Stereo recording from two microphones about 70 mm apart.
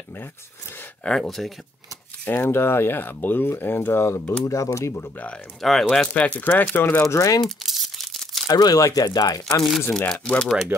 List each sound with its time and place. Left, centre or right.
1.0 s speech: centre
2.2 s speech: left
4.5 s speech: left
5.0 s speech: left
5.6 s speech: centre
6.0 s speech: centre
7.0 s speech: left
7.4 s crumpling: centre
8.5 s speech: left
9.6 s speech: centre
9.9 s speech: centre